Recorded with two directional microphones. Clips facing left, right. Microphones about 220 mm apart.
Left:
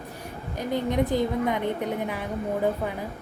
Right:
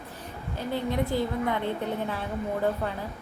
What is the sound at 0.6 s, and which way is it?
A woman's voice, 15° left (ahead or behind).